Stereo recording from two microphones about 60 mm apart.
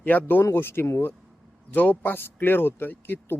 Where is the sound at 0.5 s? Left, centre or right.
Left.